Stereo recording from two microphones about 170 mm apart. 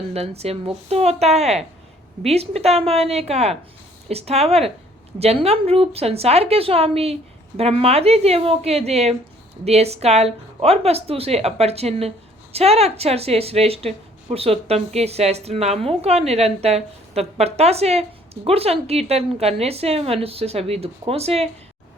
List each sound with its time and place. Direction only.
0.1 s a woman's voice: 35° right (ahead or behind)